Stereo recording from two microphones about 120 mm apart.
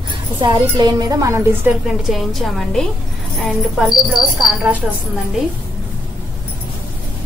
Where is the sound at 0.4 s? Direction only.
40° right (ahead or behind); by 1.8 s 15° right (ahead or behind).